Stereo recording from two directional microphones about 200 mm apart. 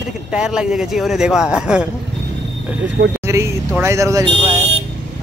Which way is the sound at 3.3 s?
15° right (ahead or behind).